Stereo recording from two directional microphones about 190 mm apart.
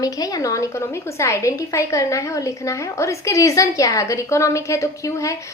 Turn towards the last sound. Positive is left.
turn(degrees=15)  # may be behind; listen again after turning